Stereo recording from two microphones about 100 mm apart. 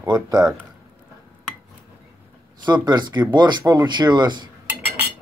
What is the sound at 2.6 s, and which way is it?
Speech, 45° right (ahead or behind).